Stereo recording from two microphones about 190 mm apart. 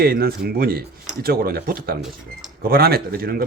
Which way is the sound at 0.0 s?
55° right (ahead or behind).